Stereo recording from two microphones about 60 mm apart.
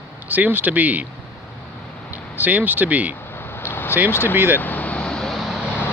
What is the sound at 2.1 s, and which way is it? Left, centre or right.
Speech, right.